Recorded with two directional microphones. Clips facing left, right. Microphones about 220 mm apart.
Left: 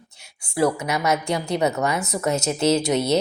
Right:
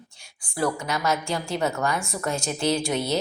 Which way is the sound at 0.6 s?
20° left (ahead or behind).